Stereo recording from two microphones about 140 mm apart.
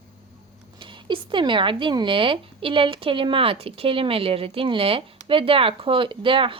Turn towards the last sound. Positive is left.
turn(degrees=-40)  # may be behind; listen again after turning